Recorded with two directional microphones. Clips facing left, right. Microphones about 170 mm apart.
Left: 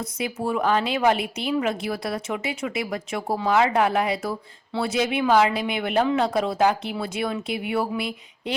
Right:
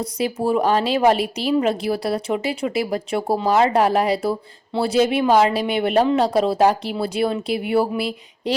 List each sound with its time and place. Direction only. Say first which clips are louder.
0.0 s a woman's voice: right 6 dB; 35° right (ahead or behind)